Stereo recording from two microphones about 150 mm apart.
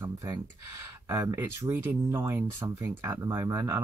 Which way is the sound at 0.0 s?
20° right (ahead or behind).